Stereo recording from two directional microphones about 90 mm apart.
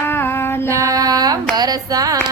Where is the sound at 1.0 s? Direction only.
45° right (ahead or behind).